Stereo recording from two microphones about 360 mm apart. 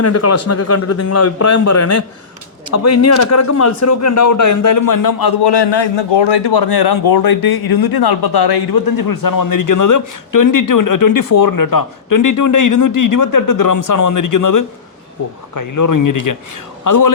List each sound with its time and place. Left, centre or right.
0.0 s speech: left